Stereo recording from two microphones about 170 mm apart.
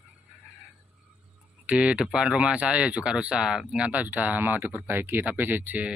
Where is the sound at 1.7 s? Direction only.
5° right (ahead or behind).